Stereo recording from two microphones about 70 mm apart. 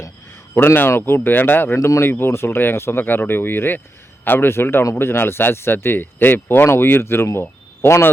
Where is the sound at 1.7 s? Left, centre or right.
Left.